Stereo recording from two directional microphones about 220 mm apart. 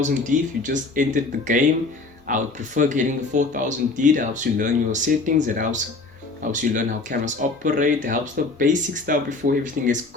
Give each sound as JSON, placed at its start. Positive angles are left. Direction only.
{"t": 0.0, "sound": "speech", "side_deg": -35}